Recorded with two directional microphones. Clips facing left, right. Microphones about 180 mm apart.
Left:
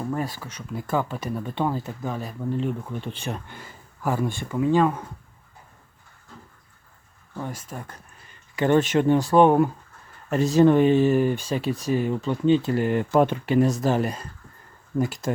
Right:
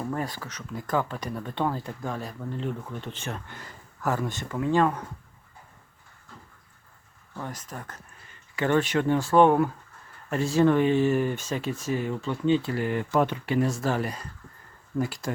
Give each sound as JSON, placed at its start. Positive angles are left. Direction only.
{"t": 0.0, "sound": "speech", "side_deg": 5}
{"t": 7.3, "sound": "speech", "side_deg": 10}
{"t": 8.5, "sound": "speech", "side_deg": 20}
{"t": 11.2, "sound": "speech", "side_deg": 30}
{"t": 12.0, "sound": "speech", "side_deg": 20}
{"t": 13.4, "sound": "speech", "side_deg": 20}